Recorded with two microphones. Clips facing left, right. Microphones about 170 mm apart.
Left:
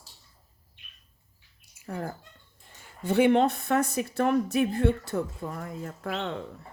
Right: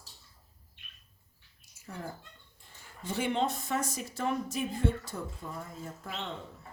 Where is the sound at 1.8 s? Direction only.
60° left (ahead or behind).